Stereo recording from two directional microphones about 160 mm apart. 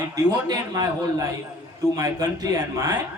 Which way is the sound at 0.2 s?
25° right (ahead or behind).